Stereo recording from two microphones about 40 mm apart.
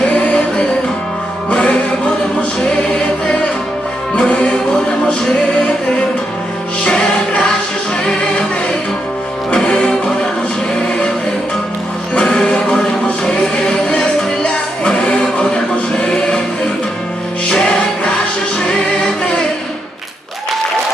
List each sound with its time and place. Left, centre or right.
0.0 s music: left
2.6 s choir: left
4.1 s music: left
6.8 s music: left
9.5 s music: left
12.1 s music: left
14.9 s music: left
17.4 s music: left